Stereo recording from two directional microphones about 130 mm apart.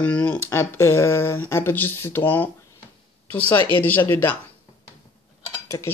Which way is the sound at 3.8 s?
15° left (ahead or behind).